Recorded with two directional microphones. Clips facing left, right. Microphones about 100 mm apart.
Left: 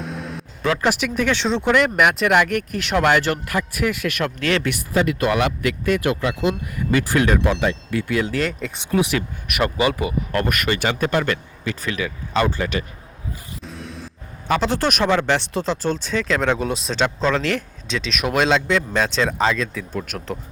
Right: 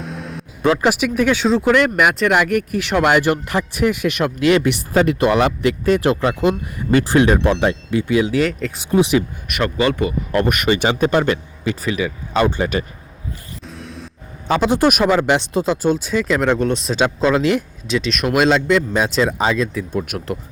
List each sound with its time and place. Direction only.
0.0 s vehicle: centre (ahead or behind)
0.8 s speech: 10° right (ahead or behind)
3.3 s speech: 25° right (ahead or behind)
5.2 s speech: 30° right (ahead or behind)
7.4 s speech: 40° right (ahead or behind)
7.9 s speech: 20° right (ahead or behind); by 8.8 s centre (ahead or behind)
8.9 s speech: 20° right (ahead or behind)
9.6 s speech: 10° left (ahead or behind)
10.3 s speech: 20° right (ahead or behind)
12.4 s speech: 20° right (ahead or behind)
13.7 s music: centre (ahead or behind)
14.4 s speech: 20° right (ahead or behind); by 16.9 s 5° left (ahead or behind)
16.9 s speech: 10° right (ahead or behind)